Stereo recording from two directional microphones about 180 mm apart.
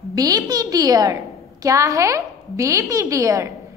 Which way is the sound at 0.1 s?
20° right (ahead or behind).